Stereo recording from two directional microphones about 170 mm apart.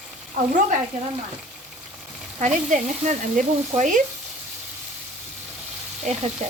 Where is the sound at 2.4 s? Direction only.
45° right (ahead or behind).